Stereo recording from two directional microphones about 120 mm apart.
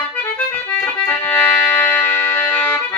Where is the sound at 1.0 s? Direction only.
15° left (ahead or behind).